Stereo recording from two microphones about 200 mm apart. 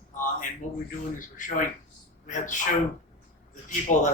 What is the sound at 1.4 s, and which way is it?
Speech, 40° left (ahead or behind).